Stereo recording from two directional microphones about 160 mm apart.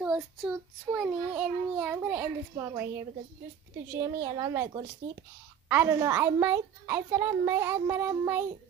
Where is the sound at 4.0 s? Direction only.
20° right (ahead or behind).